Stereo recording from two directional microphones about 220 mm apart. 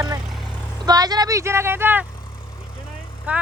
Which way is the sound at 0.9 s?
15° right (ahead or behind).